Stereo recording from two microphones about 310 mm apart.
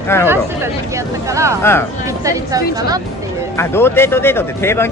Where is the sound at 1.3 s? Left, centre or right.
Centre.